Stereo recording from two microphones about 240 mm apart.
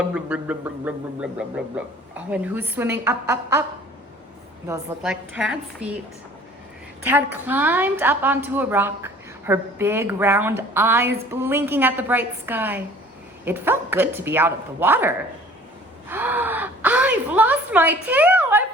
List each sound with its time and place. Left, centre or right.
0.1 s a woman's voice: centre
4.6 s a woman's voice: centre
7.1 s a woman's voice: centre